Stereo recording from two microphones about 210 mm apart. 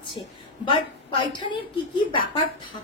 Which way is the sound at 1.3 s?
20° left (ahead or behind).